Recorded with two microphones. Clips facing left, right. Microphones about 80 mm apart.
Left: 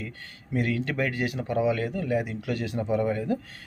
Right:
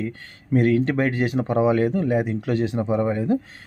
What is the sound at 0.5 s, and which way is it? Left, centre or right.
Speech, right.